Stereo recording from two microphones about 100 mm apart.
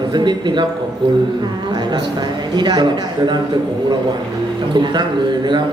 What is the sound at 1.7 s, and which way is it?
A man's voice, 45° right (ahead or behind).